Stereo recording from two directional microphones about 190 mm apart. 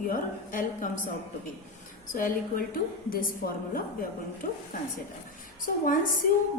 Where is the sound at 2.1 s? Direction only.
50° left (ahead or behind).